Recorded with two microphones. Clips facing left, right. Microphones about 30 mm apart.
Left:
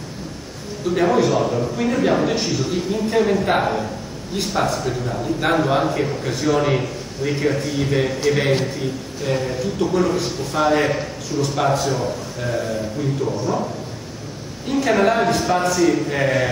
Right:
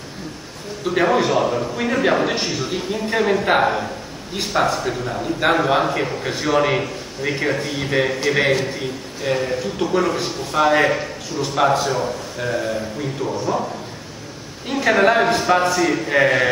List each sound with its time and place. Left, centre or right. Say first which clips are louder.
0.8 s a man's voice: even; right
14.7 s a man's voice: right 1 dB; right